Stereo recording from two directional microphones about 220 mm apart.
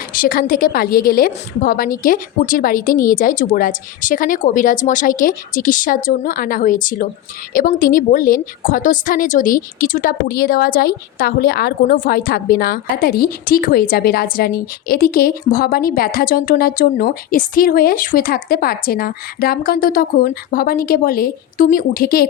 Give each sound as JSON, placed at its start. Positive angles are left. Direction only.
{"t": 0.1, "sound": "a woman's voice", "side_deg": 40}